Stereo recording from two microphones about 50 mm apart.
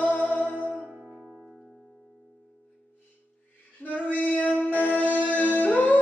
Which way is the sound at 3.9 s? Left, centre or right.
Left.